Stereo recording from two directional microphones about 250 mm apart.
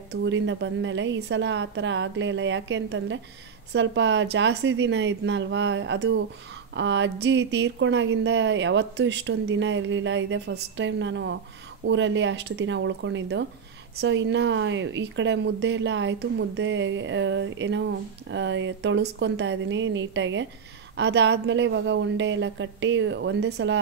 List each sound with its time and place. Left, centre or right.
0.1 s speech: right